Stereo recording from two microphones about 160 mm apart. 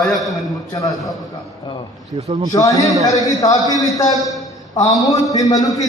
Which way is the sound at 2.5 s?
25° left (ahead or behind).